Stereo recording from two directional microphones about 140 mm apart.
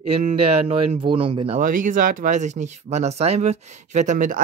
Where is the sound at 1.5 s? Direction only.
70° right (ahead or behind).